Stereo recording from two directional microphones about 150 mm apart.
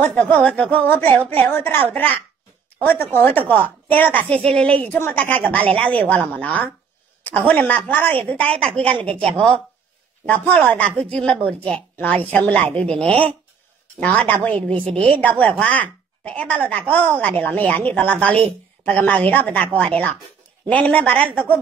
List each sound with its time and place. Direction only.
0.0 s a woman's voice: 10° left (ahead or behind)
10.2 s a woman's voice: 10° left (ahead or behind)
13.0 s speech: 40° right (ahead or behind)
13.9 s a woman's voice: 10° left (ahead or behind)